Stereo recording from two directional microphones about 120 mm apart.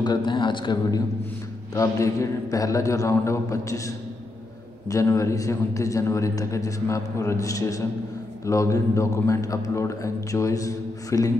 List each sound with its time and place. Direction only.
0.0 s a man's voice: 40° left (ahead or behind)
1.7 s a man's voice: 25° left (ahead or behind)